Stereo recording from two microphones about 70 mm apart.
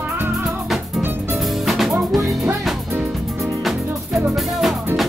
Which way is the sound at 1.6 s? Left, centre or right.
Centre.